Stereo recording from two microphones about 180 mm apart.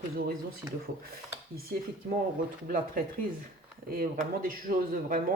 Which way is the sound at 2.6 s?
50° right (ahead or behind).